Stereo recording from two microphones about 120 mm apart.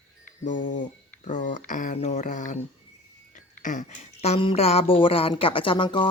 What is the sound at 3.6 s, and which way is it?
Speech, 90° left.